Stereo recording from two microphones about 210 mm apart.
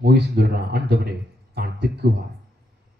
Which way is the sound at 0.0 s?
50° right (ahead or behind).